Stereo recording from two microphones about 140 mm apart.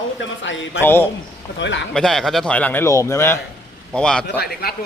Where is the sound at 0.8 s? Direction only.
15° left (ahead or behind).